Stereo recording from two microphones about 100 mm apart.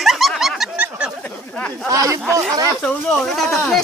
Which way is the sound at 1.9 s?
35° right (ahead or behind).